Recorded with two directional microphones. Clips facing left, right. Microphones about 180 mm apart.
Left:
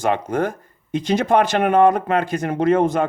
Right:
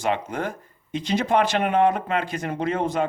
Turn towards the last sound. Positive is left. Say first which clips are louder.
# left 7 dB
turn(degrees=45)  # may be behind; listen again after turning